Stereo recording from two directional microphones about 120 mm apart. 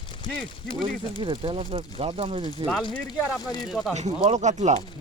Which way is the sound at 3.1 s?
35° left (ahead or behind).